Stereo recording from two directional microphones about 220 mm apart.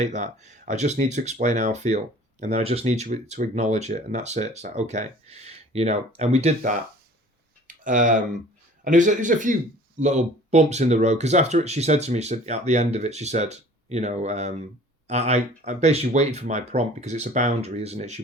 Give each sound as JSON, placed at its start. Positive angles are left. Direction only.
{"t": 0.0, "sound": "speech", "side_deg": -30}